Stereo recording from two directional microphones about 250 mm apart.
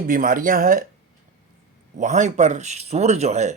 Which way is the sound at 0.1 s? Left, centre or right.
Right.